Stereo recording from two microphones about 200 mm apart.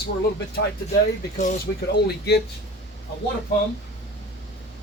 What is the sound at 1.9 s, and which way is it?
Speech, 55° left (ahead or behind).